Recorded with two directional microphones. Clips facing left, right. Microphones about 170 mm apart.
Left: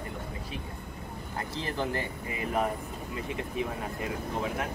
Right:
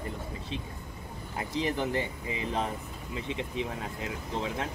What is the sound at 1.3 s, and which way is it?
Speech, 15° right (ahead or behind).